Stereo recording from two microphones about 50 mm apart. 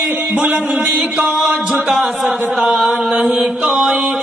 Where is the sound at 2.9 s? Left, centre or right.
Centre.